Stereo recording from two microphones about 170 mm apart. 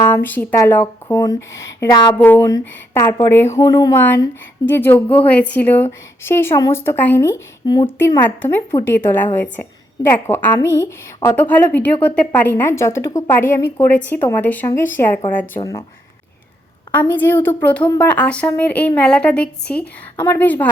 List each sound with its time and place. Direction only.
0.1 s a woman's voice: 10° left (ahead or behind)
7.9 s a woman's voice: 15° left (ahead or behind)
16.9 s a woman's voice: 10° left (ahead or behind)